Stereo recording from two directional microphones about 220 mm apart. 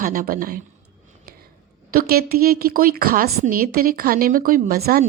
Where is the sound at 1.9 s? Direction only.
40° right (ahead or behind).